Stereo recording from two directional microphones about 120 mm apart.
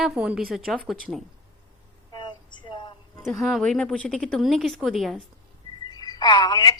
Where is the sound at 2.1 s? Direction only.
40° left (ahead or behind).